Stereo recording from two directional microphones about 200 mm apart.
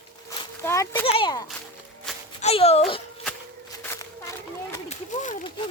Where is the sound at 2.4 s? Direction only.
30° left (ahead or behind).